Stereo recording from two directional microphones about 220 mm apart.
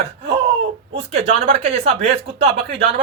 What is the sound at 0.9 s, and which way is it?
Speech, 30° right (ahead or behind).